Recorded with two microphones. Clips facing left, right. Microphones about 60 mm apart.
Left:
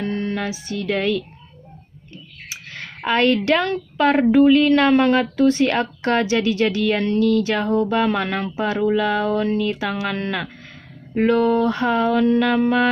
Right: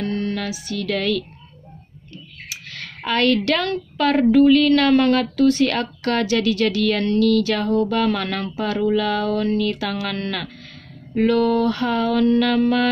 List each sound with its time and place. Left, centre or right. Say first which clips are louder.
0.0 s speech: even; centre
2.5 s a sound: left 1 dB; left
3.1 s a woman's voice: left 1 dB; left